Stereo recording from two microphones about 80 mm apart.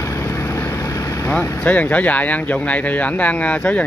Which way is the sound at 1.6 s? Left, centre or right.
Centre.